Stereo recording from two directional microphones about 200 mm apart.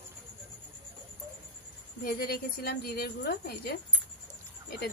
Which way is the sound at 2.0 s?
50° left (ahead or behind).